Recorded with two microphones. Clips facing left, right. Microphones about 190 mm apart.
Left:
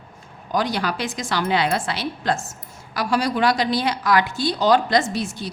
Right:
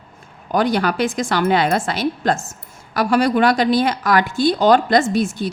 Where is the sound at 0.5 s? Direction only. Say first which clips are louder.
Right 5 dB; 55° right (ahead or behind).